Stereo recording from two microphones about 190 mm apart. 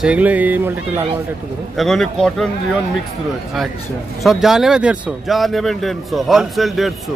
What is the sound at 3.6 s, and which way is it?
Speech, centre (ahead or behind).